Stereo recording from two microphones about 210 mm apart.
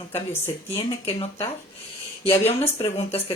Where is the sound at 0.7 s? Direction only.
25° left (ahead or behind).